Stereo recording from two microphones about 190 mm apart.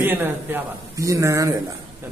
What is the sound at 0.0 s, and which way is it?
A man's voice, 10° right (ahead or behind).